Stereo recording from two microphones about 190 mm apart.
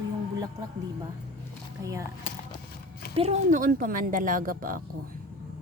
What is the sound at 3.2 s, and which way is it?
Speech, 35° right (ahead or behind).